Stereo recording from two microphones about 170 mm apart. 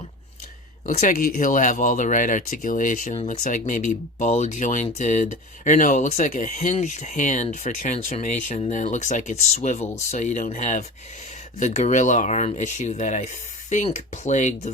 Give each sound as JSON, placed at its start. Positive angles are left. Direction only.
{"t": 0.9, "sound": "speech", "side_deg": 45}